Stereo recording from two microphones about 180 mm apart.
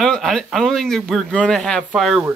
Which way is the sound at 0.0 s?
Centre (ahead or behind).